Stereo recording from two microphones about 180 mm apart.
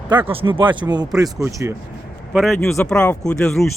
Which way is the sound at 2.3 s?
Centre (ahead or behind).